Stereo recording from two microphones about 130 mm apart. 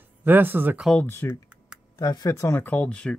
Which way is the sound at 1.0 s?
20° left (ahead or behind).